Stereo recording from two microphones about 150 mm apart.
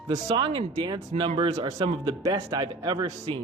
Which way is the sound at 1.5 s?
25° right (ahead or behind).